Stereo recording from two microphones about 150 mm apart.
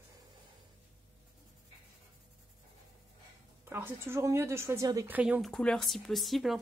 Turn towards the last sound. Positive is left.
turn(degrees=0)  # may be behind; listen again after turning